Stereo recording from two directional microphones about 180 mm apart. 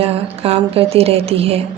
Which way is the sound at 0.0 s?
35° right (ahead or behind).